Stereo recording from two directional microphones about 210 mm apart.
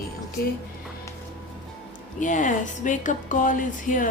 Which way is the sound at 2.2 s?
35° left (ahead or behind).